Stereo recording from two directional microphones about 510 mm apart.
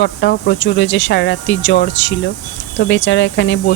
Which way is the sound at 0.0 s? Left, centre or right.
Centre.